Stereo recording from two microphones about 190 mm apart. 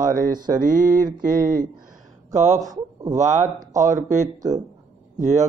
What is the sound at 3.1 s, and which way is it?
Speech, 40° right (ahead or behind).